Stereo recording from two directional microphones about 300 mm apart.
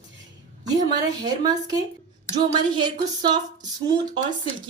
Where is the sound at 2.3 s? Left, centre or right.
Centre.